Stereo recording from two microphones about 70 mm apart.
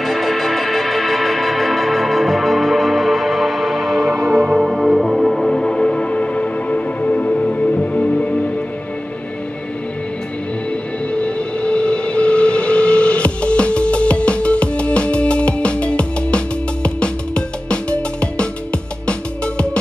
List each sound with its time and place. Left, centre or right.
0.0 s music: centre
11.1 s train: centre